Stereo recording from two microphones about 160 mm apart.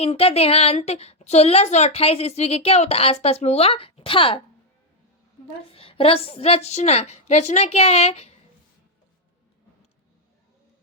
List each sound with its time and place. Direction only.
0.0 s a woman's voice: 35° left (ahead or behind)
5.7 s a woman's voice: 35° left (ahead or behind)